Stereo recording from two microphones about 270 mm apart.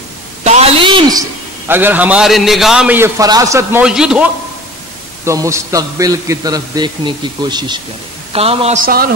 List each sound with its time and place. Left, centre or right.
0.4 s a sound: right
1.7 s a man's voice: centre
8.8 s a man's voice: right